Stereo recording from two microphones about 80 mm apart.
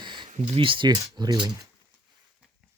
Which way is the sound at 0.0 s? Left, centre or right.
Right.